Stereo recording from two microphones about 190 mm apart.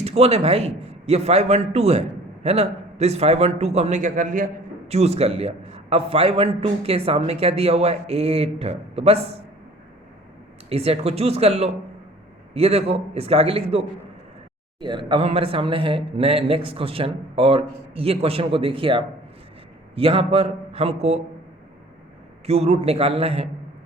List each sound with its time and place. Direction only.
0.0 s a man's voice: 30° right (ahead or behind)
10.7 s a man's voice: 30° right (ahead or behind)
22.4 s a man's voice: 35° right (ahead or behind)